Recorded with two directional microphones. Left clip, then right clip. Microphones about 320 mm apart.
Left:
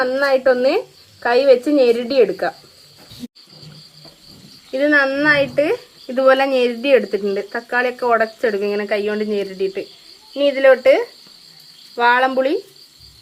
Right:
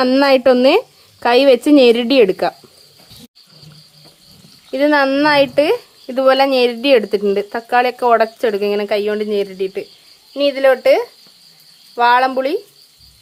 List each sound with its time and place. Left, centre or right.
0.0 s speech: right
4.7 s speech: centre